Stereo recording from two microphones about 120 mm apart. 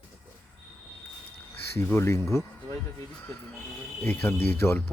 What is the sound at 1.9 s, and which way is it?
Speech, 20° left (ahead or behind).